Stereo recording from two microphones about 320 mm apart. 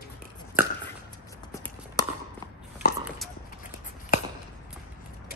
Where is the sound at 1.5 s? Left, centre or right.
Centre.